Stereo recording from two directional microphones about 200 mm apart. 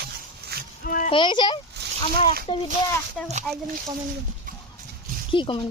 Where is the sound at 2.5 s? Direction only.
25° left (ahead or behind).